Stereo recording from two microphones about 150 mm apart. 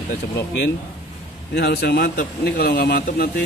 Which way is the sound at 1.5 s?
90° left.